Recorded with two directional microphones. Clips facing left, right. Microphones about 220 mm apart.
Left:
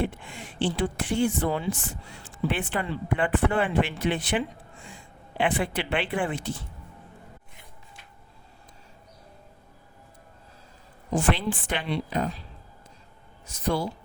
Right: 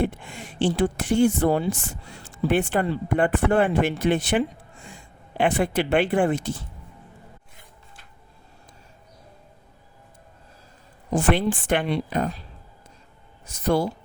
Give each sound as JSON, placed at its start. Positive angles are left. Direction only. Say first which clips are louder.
{"t": 0.0, "sound": "speech", "louder": "right 4 dB", "side_deg": -45}
{"t": 11.1, "sound": "speech", "louder": "right 4 dB", "side_deg": -50}